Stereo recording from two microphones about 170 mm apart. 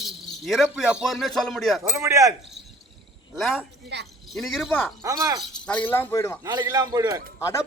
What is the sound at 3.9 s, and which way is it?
Speech, 80° right.